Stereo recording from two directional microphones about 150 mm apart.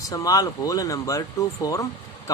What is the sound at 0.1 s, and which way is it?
Speech, 25° left (ahead or behind).